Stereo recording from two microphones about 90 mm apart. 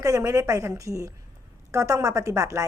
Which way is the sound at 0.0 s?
35° right (ahead or behind).